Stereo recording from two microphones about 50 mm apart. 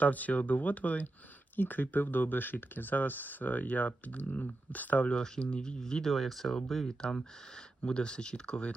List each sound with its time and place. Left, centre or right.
0.0 s speech: left
5.1 s speech: centre